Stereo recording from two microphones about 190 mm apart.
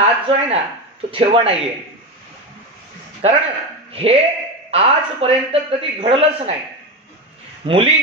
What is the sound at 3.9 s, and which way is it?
Speech, 30° right (ahead or behind).